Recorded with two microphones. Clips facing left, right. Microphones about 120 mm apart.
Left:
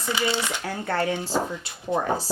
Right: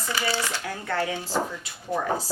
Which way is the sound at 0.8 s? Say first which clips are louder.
Left 2 dB; 50° left (ahead or behind).